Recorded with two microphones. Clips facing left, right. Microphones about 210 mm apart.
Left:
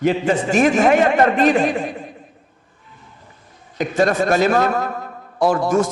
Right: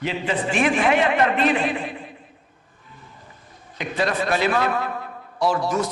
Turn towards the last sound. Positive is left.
turn(degrees=50)  # may be behind; listen again after turning